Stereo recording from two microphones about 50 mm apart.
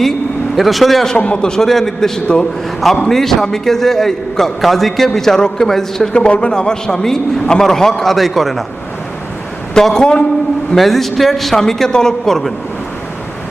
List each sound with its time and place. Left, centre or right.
0.5 s a man's voice: centre
1.0 s a man's voice: left
6.1 s a man's voice: left; by 8.6 s centre
9.7 s a man's voice: centre
10.0 s a man's voice: centre
10.8 s a man's voice: centre